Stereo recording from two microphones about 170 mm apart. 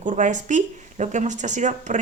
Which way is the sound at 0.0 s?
45° right (ahead or behind).